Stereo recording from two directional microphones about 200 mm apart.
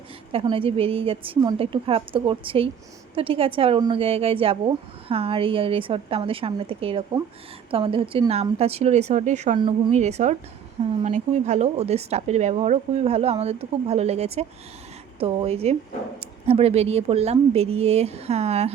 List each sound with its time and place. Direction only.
0.3 s speech: 25° right (ahead or behind)
9.6 s speech: 25° right (ahead or behind)
9.9 s speech: 35° right (ahead or behind)